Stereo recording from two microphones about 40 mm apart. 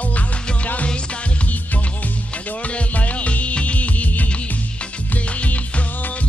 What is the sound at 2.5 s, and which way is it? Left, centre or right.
Music, left.